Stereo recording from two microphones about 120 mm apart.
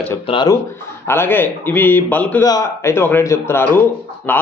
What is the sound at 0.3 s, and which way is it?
Speech, 50° left (ahead or behind).